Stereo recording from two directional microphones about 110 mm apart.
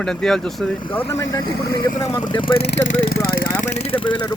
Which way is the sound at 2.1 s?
45° left (ahead or behind).